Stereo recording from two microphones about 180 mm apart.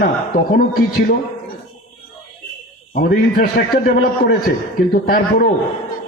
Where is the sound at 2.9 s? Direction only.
50° left (ahead or behind).